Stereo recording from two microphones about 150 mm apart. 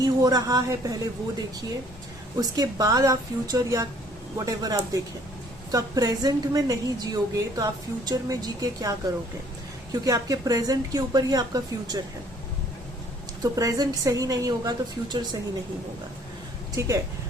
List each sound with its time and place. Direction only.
0.0 s speech: 25° right (ahead or behind)
2.4 s a woman's voice: 25° right (ahead or behind)
13.4 s a woman's voice: 25° right (ahead or behind)
16.7 s a woman's voice: 20° right (ahead or behind)